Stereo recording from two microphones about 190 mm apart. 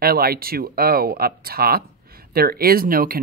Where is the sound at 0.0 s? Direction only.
55° right (ahead or behind).